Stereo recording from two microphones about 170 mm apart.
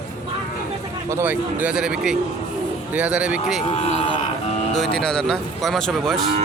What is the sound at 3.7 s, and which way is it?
Speech, 40° left (ahead or behind).